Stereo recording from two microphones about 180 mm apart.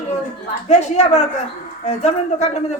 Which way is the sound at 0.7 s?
40° left (ahead or behind).